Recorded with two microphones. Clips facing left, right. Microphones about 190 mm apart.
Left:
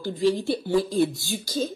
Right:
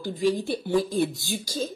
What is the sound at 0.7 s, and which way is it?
Speech, centre (ahead or behind).